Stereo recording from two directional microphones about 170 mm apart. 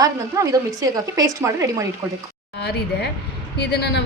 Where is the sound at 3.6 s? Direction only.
75° left (ahead or behind).